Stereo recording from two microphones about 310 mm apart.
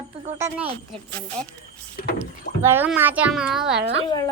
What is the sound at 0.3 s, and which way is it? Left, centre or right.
Speech, centre.